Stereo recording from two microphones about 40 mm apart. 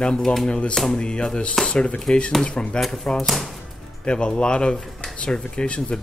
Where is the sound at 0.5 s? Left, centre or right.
Left.